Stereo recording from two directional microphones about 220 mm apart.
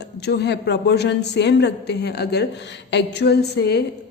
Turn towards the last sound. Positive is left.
turn(degrees=45)  # may be behind; listen again after turning